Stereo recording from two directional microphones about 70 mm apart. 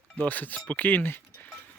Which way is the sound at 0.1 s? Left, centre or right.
Left.